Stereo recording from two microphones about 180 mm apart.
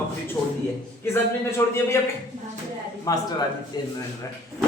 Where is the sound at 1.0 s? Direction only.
15° left (ahead or behind).